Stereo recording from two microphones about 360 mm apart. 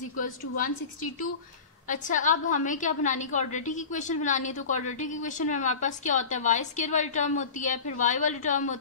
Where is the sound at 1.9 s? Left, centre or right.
Left.